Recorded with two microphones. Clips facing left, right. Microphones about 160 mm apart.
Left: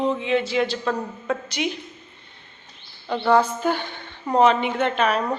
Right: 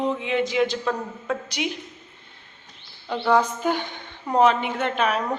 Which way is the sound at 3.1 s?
10° right (ahead or behind).